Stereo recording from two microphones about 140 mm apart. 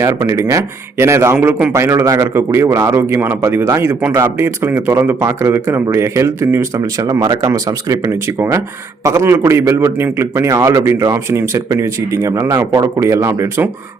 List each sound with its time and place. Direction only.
0.0 s a man's voice: 20° right (ahead or behind)
1.7 s a man's voice: 20° right (ahead or behind)